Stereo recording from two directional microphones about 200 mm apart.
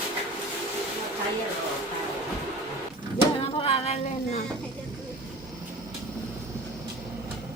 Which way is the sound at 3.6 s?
30° left (ahead or behind).